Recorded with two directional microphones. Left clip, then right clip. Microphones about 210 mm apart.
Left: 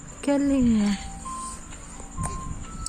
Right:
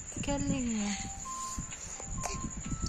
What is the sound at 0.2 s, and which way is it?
Speech, 15° left (ahead or behind).